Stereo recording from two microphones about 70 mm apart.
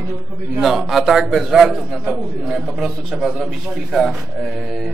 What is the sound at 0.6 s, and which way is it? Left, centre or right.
A man's voice, centre.